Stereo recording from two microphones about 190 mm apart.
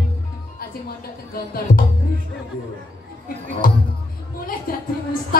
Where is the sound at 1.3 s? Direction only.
50° left (ahead or behind).